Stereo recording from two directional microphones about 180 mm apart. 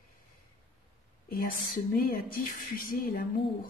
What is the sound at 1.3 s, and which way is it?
A woman's voice, 55° left (ahead or behind).